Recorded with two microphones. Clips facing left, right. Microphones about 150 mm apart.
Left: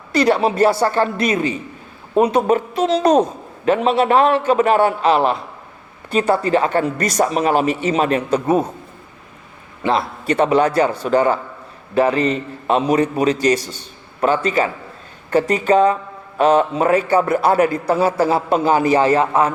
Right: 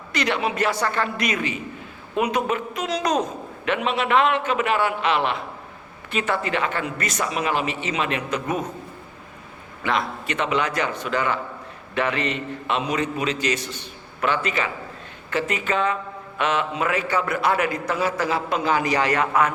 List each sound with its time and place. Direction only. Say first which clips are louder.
0.1 s a man's voice: left 9 dB; 35° left (ahead or behind)
9.8 s a man's voice: left 6 dB; 35° left (ahead or behind)